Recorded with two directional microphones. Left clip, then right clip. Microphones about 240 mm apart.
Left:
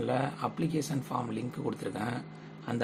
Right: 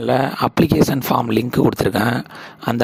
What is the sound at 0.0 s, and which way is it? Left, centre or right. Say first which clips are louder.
Speech: right 14 dB; right.